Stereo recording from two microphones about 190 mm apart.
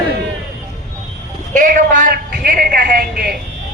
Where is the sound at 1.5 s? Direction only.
45° right (ahead or behind).